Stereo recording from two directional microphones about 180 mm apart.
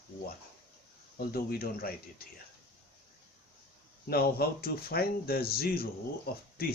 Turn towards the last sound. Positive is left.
turn(degrees=60)  # may be behind; listen again after turning